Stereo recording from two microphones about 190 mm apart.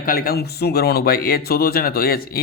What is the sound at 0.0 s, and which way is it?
Speech, 50° left (ahead or behind).